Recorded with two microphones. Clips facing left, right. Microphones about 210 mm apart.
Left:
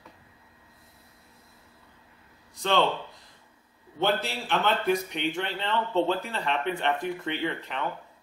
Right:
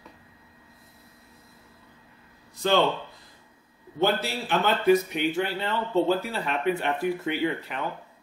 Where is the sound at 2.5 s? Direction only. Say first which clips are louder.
Right 3 dB; 5° right (ahead or behind).